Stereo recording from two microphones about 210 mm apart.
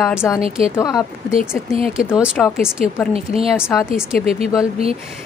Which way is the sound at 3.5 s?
10° left (ahead or behind).